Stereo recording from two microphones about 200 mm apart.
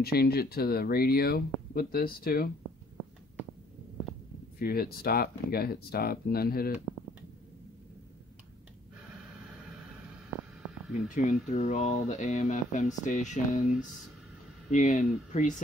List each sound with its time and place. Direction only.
0.0 s speech: 50° left (ahead or behind)
4.6 s speech: 50° left (ahead or behind)
11.1 s speech: 35° left (ahead or behind)